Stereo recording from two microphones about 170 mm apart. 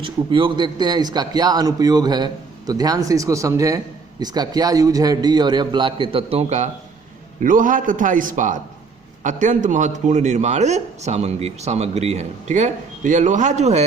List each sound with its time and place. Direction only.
0.0 s a man's voice: 30° right (ahead or behind)
7.4 s a man's voice: 50° right (ahead or behind)